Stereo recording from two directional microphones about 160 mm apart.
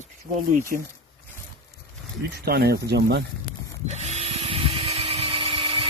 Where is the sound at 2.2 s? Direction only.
90° right.